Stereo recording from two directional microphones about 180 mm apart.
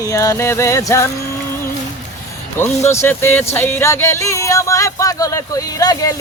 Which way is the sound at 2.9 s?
15° left (ahead or behind).